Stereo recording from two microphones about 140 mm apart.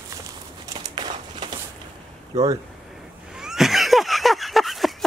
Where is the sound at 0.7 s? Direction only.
35° right (ahead or behind).